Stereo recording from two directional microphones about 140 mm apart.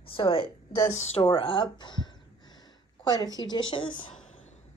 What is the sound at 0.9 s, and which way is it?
A woman's voice, 50° left (ahead or behind).